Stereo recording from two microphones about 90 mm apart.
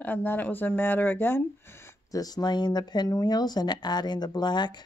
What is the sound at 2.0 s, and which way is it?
Speech, 45° left (ahead or behind).